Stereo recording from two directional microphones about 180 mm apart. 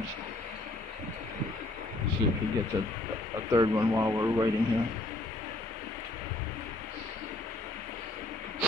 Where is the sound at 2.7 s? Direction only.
20° right (ahead or behind).